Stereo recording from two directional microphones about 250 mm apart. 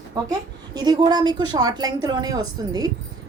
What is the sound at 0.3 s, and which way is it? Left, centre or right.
A woman's voice, centre.